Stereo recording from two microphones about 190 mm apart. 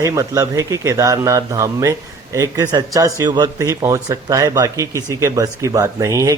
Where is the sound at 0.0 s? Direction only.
15° right (ahead or behind).